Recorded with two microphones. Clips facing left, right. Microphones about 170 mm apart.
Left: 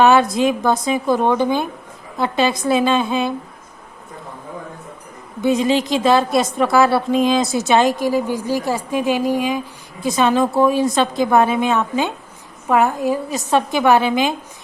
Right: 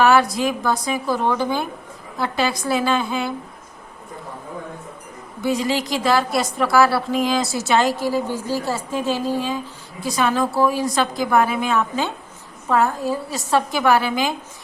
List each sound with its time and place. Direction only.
0.0 s a woman's voice: 20° left (ahead or behind)
5.4 s a woman's voice: 20° left (ahead or behind)